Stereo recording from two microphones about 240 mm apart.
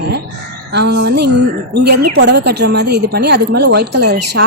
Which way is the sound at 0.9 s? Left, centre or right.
Right.